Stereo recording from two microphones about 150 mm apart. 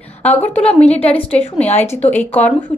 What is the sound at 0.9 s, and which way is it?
A woman's voice, 45° left (ahead or behind).